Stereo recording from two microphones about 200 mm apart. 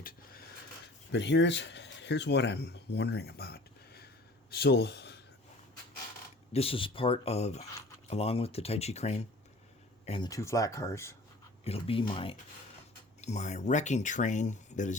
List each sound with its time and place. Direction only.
1.1 s speech: 60° left (ahead or behind)
6.5 s speech: 30° left (ahead or behind)
10.1 s speech: 20° left (ahead or behind)
11.6 s speech: 30° left (ahead or behind)